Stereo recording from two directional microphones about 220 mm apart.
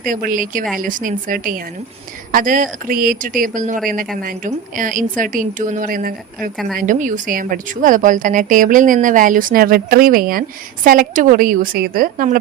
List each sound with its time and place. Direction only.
0.1 s a woman's voice: 40° right (ahead or behind)